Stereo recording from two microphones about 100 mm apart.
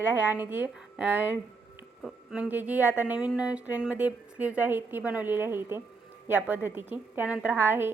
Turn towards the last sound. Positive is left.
turn(degrees=-20)  # may be behind; listen again after turning